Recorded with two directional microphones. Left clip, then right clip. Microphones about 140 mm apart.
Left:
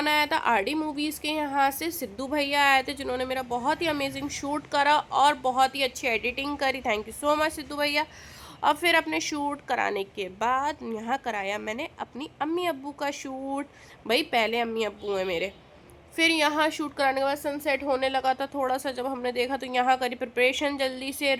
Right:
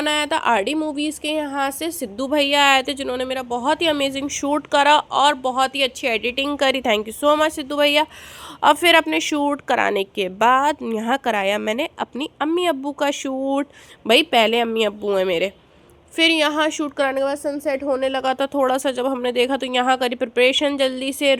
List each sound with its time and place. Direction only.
0.0 s a woman's voice: 20° right (ahead or behind); by 15.5 s 40° right (ahead or behind)
16.1 s a woman's voice: 25° right (ahead or behind)
17.6 s a woman's voice: centre (ahead or behind)
17.8 s a woman's voice: 15° right (ahead or behind)
18.1 s speech: 30° right (ahead or behind)